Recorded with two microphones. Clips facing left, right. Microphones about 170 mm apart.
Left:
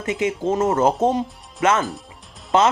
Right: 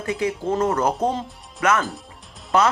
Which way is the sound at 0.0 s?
20° left (ahead or behind).